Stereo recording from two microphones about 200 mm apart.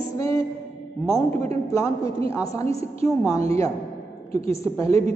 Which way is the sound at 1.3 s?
35° right (ahead or behind).